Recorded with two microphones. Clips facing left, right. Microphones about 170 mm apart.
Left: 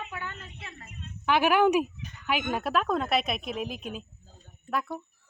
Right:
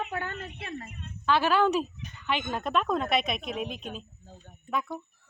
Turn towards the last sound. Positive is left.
turn(degrees=5)  # may be behind; listen again after turning